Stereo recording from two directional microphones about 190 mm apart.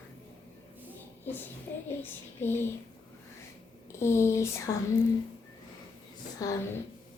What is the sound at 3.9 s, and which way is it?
Speech, 15° left (ahead or behind).